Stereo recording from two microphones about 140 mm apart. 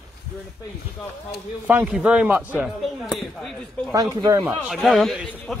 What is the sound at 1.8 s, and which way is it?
Speech, 5° right (ahead or behind).